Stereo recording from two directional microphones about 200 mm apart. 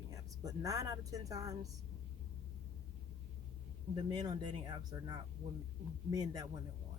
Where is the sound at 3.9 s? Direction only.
20° right (ahead or behind).